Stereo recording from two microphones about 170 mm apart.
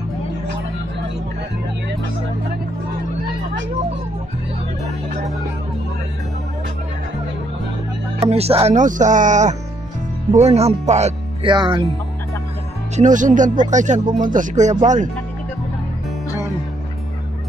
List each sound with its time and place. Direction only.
8.2 s speech: 35° right (ahead or behind)
11.4 s speech: 30° right (ahead or behind)
12.9 s speech: 50° right (ahead or behind)